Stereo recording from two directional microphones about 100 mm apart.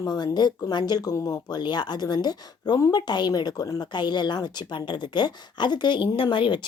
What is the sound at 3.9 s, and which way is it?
Speech, 45° left (ahead or behind).